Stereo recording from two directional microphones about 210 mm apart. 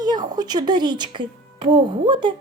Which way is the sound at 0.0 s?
20° right (ahead or behind).